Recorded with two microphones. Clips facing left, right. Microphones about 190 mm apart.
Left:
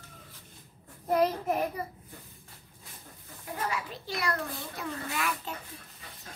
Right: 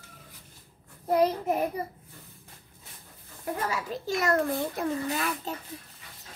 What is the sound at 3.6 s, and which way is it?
A child's voice, 40° right (ahead or behind).